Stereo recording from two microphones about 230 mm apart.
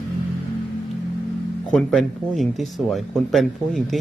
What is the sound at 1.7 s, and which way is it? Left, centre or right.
A woman's voice, centre.